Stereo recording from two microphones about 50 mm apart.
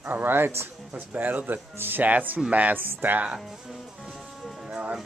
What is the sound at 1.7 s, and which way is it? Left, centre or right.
Speech, right.